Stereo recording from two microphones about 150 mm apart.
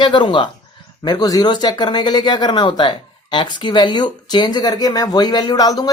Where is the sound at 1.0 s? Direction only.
25° left (ahead or behind).